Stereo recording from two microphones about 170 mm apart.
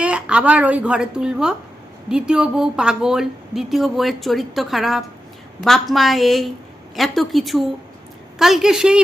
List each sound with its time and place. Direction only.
0.0 s a woman's voice: 5° right (ahead or behind)